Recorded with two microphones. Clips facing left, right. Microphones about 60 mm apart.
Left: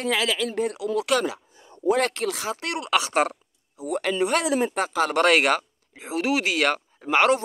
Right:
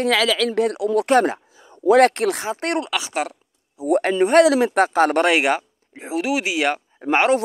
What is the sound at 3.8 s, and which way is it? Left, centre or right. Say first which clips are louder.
Speech: right 8 dB; right.